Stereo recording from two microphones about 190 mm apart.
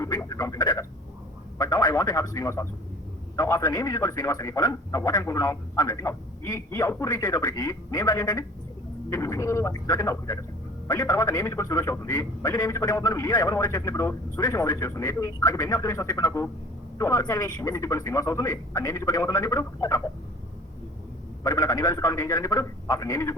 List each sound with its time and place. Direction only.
0.0 s frog: 20° left (ahead or behind)
1.5 s a man's voice: 20° left (ahead or behind)
21.4 s a man's voice: 20° left (ahead or behind)